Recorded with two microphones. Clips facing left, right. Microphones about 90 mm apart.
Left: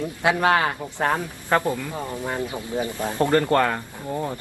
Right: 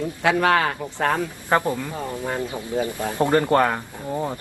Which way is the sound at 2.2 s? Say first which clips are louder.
Right 1 dB; 20° left (ahead or behind).